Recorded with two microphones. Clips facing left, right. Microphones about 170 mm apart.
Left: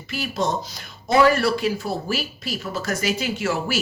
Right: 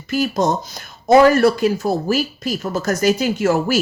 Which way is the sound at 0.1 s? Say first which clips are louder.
Right 7 dB; 45° right (ahead or behind).